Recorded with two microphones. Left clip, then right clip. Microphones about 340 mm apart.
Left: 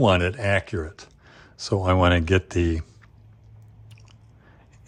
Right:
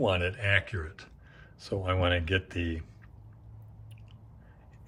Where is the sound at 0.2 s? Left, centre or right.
Centre.